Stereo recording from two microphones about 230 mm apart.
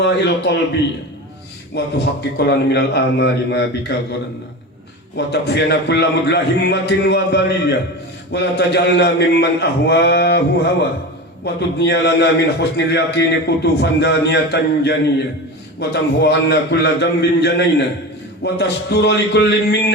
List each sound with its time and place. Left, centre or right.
0.0 s a man's voice: left
1.7 s a man's voice: left
5.1 s a man's voice: left